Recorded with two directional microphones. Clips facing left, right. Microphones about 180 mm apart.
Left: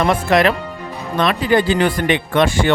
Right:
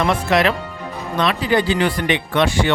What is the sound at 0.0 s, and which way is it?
Speech, 50° left (ahead or behind).